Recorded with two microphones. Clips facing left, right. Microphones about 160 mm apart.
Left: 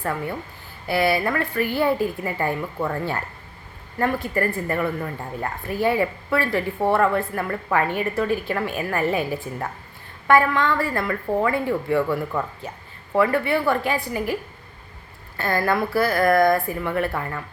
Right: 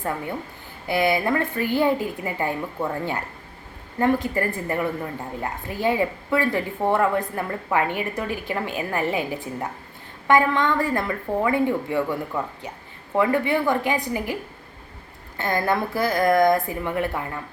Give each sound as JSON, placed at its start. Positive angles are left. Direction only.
{"t": 0.0, "sound": "a woman's voice", "side_deg": -15}
{"t": 15.4, "sound": "a woman's voice", "side_deg": -20}